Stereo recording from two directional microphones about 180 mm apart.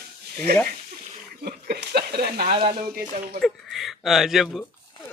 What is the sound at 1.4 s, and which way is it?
Speech, 60° right (ahead or behind).